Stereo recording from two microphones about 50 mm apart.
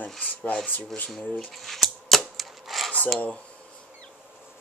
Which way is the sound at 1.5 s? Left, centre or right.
Centre.